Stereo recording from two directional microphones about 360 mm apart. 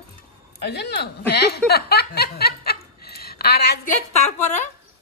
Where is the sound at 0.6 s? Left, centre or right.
Left.